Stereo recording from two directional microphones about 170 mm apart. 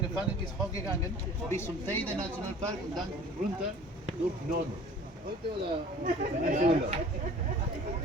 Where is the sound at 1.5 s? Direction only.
15° left (ahead or behind).